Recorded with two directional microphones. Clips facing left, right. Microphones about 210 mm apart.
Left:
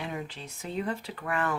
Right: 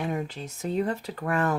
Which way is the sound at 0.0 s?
45° right (ahead or behind).